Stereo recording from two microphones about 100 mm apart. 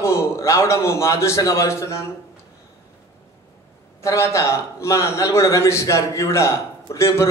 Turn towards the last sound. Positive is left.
turn(degrees=30)  # may be behind; listen again after turning